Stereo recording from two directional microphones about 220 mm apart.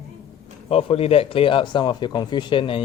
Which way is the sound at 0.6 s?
25° left (ahead or behind).